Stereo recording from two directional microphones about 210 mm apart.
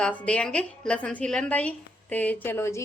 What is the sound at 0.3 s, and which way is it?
A woman's voice, 5° left (ahead or behind).